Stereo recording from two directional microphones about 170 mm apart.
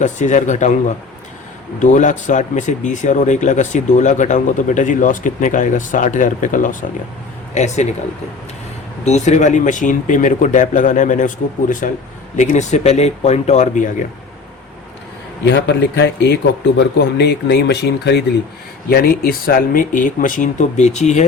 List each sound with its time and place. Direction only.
0.0 s speech: 45° left (ahead or behind)
1.8 s speech: 45° left (ahead or behind)
9.0 s speech: 45° left (ahead or behind)
15.4 s speech: 90° left
18.9 s speech: 65° left (ahead or behind); by 21.2 s 45° left (ahead or behind)